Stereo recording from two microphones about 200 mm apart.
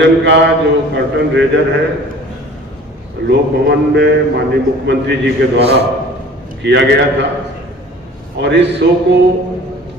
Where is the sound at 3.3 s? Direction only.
55° right (ahead or behind).